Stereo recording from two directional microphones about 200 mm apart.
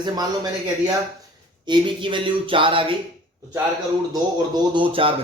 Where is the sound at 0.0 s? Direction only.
20° right (ahead or behind).